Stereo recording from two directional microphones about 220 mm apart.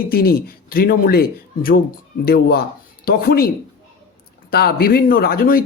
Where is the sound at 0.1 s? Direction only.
45° left (ahead or behind).